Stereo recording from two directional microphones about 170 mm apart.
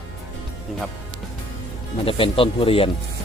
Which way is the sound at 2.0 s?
30° left (ahead or behind).